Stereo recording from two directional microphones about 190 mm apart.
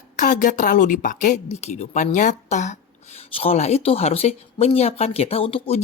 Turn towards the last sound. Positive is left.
turn(degrees=30)  # may be behind; listen again after turning